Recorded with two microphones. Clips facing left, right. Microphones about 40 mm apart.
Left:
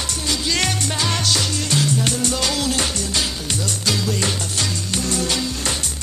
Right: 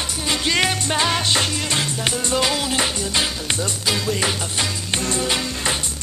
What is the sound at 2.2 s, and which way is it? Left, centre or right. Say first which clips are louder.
Music: right 1 dB; right.